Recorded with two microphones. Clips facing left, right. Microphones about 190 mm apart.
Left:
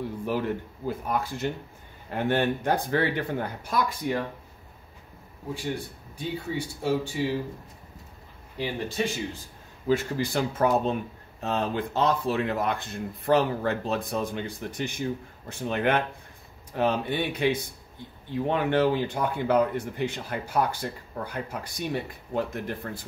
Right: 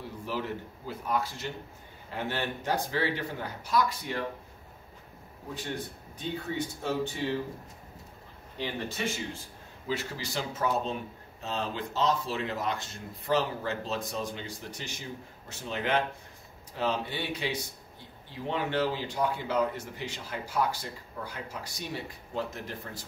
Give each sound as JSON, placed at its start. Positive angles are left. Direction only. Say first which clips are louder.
{"t": 0.8, "sound": "speech", "louder": "left 3 dB", "side_deg": 50}
{"t": 5.5, "sound": "speech", "louder": "left 4 dB", "side_deg": 10}
{"t": 8.5, "sound": "speech", "louder": "left 5 dB", "side_deg": 10}
{"t": 9.8, "sound": "speech", "louder": "left 9 dB", "side_deg": 50}